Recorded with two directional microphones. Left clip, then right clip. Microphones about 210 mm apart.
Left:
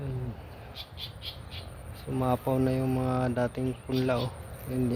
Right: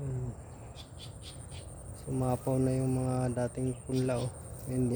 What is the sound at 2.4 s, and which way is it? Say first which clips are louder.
A man's voice: left 3 dB; 10° right (ahead or behind).